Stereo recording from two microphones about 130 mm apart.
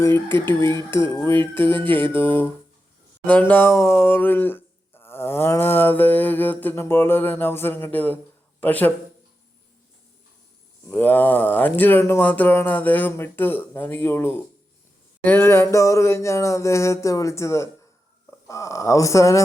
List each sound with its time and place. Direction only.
0.4 s speech: 20° left (ahead or behind)
10.8 s speech: 15° left (ahead or behind)
15.2 s a sound: 15° left (ahead or behind)